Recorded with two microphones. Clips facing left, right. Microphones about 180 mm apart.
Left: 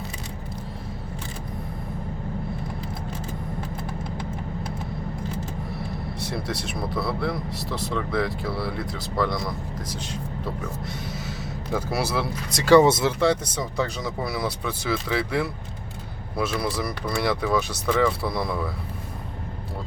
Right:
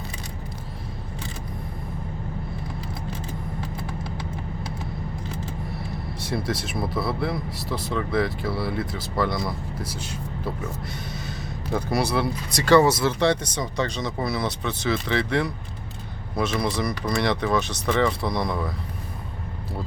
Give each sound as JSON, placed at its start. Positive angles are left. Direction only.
{"t": 5.7, "sound": "speech", "side_deg": 0}
{"t": 11.1, "sound": "speech", "side_deg": 5}
{"t": 12.7, "sound": "speech", "side_deg": 20}
{"t": 13.1, "sound": "speech", "side_deg": 5}